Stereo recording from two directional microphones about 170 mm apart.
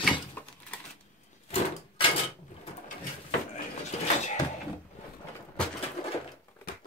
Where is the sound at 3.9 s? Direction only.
40° left (ahead or behind).